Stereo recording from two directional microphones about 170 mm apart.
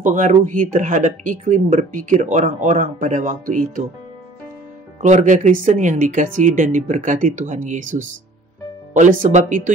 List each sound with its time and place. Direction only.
0.0 s speech: 50° right (ahead or behind)
5.0 s speech: 45° right (ahead or behind)